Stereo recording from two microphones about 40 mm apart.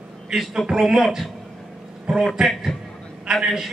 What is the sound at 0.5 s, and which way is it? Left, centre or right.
Speech, centre.